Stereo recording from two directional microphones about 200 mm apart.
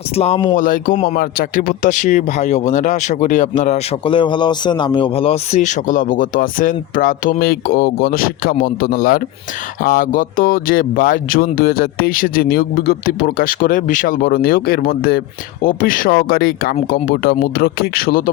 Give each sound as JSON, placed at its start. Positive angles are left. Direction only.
{"t": 0.2, "sound": "speech", "side_deg": 25}
{"t": 0.5, "sound": "speech", "side_deg": 40}